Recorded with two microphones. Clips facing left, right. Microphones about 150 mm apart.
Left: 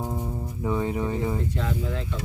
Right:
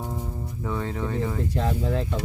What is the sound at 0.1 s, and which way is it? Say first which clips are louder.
Music: left 2 dB; 15° left (ahead or behind).